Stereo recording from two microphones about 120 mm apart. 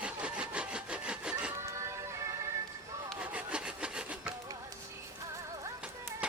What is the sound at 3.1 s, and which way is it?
Wood, 10° right (ahead or behind).